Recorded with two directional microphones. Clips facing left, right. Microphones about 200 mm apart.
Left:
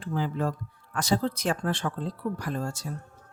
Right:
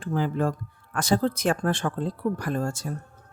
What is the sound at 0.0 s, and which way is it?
Speech, 50° right (ahead or behind).